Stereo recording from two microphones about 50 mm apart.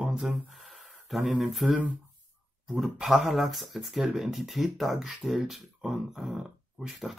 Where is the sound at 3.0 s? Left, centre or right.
Centre.